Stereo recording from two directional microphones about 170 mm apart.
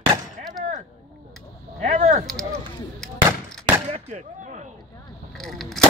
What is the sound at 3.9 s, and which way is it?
Speech, 40° right (ahead or behind).